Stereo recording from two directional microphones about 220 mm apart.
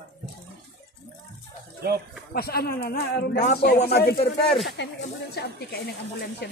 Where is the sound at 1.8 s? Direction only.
45° right (ahead or behind).